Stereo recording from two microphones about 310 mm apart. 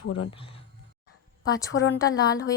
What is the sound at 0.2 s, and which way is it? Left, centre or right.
Speech, centre.